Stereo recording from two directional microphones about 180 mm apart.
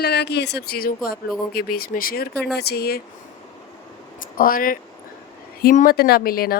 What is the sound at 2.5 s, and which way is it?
Speech, 65° left (ahead or behind).